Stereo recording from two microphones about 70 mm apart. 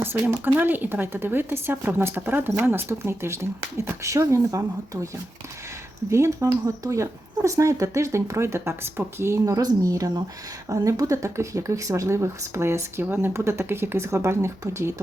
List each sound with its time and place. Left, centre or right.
0.0 s speech: right
6.1 s speech: right
9.6 s speech: right